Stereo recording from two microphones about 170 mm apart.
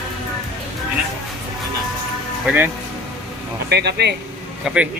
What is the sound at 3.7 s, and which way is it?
Speech, 80° right.